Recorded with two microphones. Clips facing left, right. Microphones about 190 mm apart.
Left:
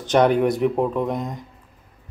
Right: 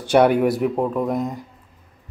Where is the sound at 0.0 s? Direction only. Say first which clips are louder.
Right 2 dB; 10° right (ahead or behind).